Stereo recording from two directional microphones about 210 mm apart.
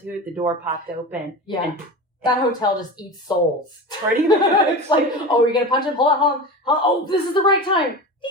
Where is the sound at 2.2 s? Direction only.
20° left (ahead or behind).